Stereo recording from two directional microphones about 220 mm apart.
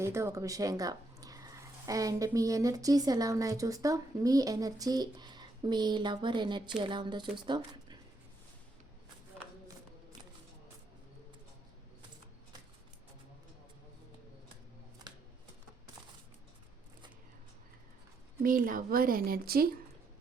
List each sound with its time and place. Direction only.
0.0 s speech: 10° right (ahead or behind)
18.4 s speech: 40° right (ahead or behind)